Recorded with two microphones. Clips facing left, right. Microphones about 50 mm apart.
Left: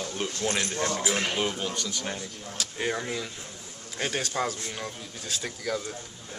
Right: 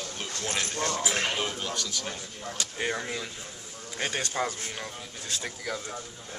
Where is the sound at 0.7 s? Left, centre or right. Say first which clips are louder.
Left 1 dB; left.